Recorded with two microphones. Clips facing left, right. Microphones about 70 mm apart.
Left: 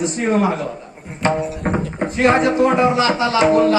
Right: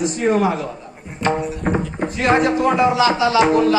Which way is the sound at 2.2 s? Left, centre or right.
Left.